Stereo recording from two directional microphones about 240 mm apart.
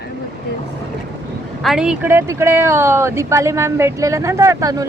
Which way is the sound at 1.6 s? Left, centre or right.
Centre.